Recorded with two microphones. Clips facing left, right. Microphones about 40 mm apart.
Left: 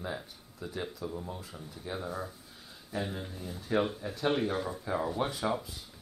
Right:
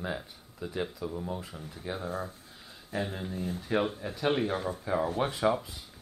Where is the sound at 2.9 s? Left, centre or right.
Right.